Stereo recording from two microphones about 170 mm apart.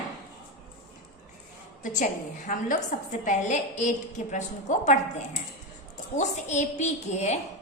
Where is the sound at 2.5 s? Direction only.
50° left (ahead or behind).